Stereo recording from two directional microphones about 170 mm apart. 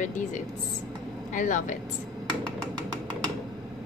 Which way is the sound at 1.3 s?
50° left (ahead or behind).